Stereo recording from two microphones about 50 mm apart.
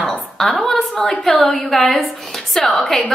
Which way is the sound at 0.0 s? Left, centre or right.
Centre.